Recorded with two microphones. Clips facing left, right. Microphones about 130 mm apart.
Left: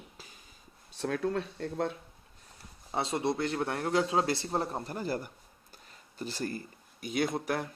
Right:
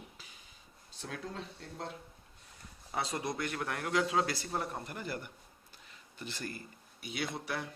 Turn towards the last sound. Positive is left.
turn(degrees=45)  # may be behind; listen again after turning